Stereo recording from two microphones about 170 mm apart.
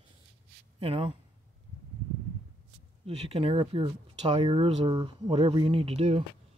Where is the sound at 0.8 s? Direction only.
35° right (ahead or behind).